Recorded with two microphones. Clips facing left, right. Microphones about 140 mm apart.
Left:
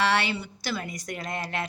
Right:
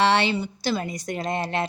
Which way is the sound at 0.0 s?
25° right (ahead or behind).